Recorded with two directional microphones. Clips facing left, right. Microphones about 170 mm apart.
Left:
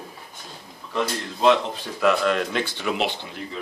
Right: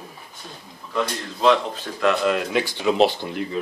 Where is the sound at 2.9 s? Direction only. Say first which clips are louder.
Right 8 dB; 35° right (ahead or behind).